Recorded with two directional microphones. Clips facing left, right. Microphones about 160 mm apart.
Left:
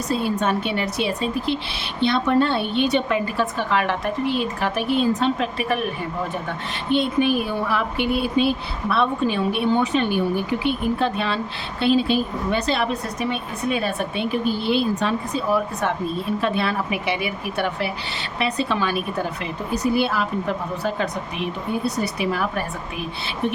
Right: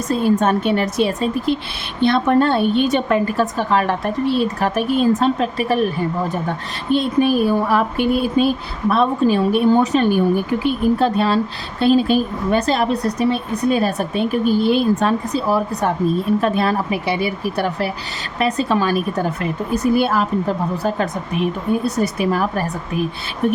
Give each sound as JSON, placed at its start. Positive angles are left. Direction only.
{"t": 0.1, "sound": "a woman's voice", "side_deg": -45}